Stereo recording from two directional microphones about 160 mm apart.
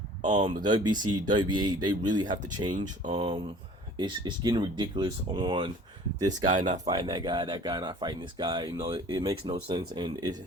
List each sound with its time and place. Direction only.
0.2 s speech: 30° right (ahead or behind)